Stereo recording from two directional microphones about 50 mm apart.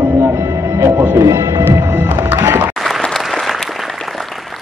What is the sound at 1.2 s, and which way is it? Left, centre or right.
Speech, right.